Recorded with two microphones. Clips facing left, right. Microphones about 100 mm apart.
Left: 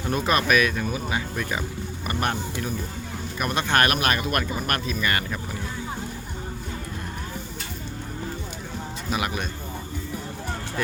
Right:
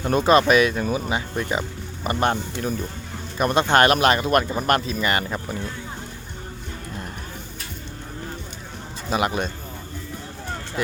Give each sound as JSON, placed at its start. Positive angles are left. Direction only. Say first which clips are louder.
{"t": 0.1, "sound": "speech", "louder": "right 6 dB", "side_deg": -30}
{"t": 9.0, "sound": "speech", "louder": "right 6 dB", "side_deg": -30}